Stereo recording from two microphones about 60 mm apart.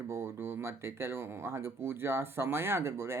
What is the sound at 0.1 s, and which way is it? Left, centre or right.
Speech, right.